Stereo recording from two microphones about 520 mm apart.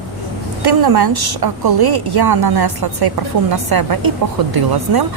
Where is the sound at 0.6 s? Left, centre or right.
Right.